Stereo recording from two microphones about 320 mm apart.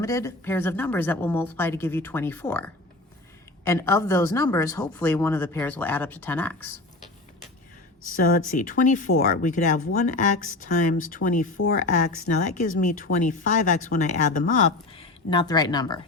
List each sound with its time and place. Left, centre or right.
0.0 s a woman's voice: centre
8.0 s speech: left